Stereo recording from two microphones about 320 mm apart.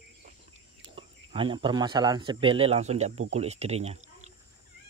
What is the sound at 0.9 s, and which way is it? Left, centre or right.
Speech, centre.